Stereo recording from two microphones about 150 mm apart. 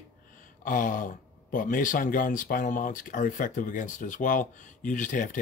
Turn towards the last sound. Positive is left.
turn(degrees=55)  # may be behind; listen again after turning